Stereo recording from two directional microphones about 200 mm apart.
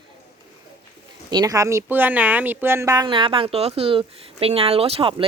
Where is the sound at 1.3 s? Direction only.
15° right (ahead or behind).